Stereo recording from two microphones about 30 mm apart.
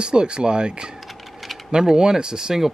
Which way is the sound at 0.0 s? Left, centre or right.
Right.